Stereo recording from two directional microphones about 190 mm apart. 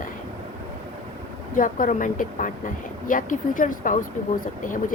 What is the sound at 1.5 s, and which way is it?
A woman's voice, 45° left (ahead or behind).